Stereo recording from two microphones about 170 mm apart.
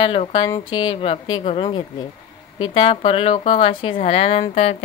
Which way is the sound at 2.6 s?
30° left (ahead or behind).